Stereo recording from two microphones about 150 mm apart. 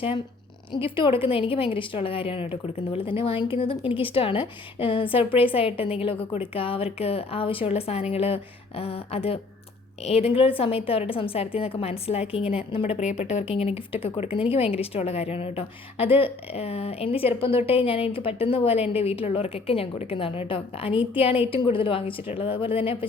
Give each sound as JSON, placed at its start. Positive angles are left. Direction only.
{"t": 0.7, "sound": "a woman's voice", "side_deg": 35}